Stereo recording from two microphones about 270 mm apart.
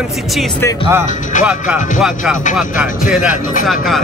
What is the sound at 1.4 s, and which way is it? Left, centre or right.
Speech, centre.